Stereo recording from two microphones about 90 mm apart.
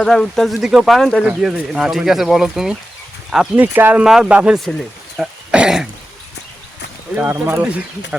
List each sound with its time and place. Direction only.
0.0 s speech: 5° left (ahead or behind)
3.6 s speech: 20° right (ahead or behind)
4.0 s speech: 5° right (ahead or behind)
5.1 s throat clearing: 10° right (ahead or behind)
7.2 s speech: 25° right (ahead or behind)